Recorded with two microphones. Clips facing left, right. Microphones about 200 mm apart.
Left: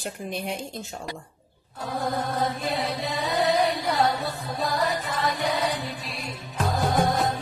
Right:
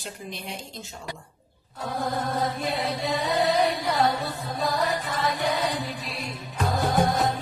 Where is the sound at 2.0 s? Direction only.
Centre (ahead or behind).